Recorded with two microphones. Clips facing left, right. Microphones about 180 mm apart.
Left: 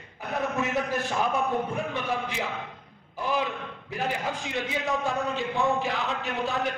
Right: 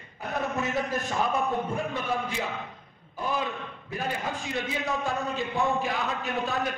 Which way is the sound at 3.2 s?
15° left (ahead or behind).